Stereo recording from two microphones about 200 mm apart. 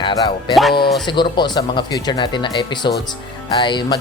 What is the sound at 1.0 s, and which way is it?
Speech, 20° left (ahead or behind).